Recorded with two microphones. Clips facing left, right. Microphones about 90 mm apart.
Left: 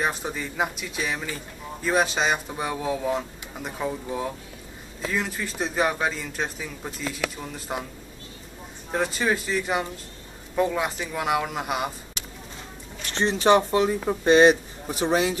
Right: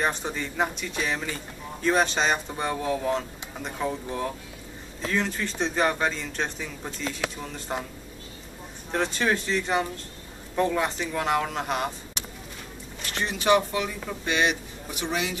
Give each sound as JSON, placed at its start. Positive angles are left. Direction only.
{"t": 0.0, "sound": "speech", "side_deg": 5}
{"t": 8.9, "sound": "a man's voice", "side_deg": 5}
{"t": 13.1, "sound": "speech", "side_deg": 30}